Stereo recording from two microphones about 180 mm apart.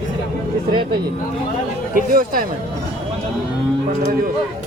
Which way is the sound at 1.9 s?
50° right (ahead or behind).